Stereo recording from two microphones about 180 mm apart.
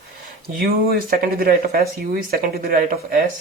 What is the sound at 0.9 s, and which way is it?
Speech, 55° right (ahead or behind).